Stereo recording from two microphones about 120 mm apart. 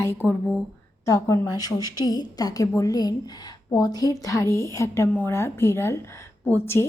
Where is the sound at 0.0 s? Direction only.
15° left (ahead or behind).